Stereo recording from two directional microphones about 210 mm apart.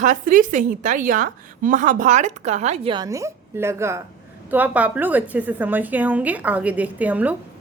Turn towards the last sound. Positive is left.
turn(degrees=-5)  # may be behind; listen again after turning